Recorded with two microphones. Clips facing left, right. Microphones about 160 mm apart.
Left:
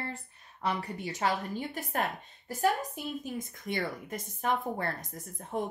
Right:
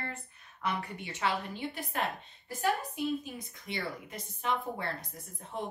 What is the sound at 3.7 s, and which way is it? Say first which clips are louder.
Speech: left 4 dB; 50° left (ahead or behind).